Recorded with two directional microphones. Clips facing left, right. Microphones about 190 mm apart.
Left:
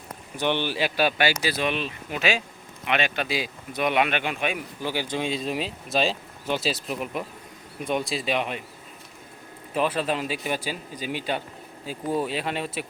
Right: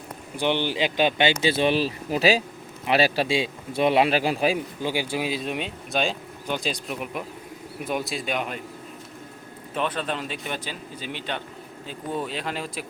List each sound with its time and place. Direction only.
0.3 s a man's voice: 15° right (ahead or behind); by 4.6 s 35° right (ahead or behind)
4.8 s speech: 15° right (ahead or behind); by 8.6 s centre (ahead or behind)
9.7 s speech: 5° left (ahead or behind)